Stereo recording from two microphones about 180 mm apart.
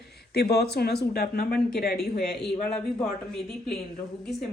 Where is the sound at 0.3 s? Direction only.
65° left (ahead or behind).